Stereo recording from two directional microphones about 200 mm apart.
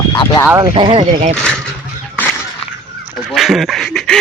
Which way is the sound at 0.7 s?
30° right (ahead or behind).